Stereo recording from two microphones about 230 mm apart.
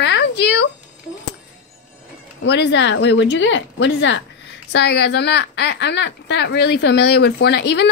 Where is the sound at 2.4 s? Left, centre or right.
Left.